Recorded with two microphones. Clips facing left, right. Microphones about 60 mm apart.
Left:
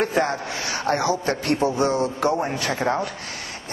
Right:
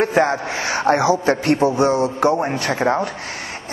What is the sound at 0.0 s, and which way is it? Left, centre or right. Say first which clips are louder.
A man's voice: right 5 dB; right.